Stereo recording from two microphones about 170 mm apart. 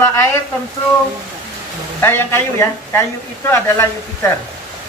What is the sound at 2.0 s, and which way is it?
Speech, 15° left (ahead or behind).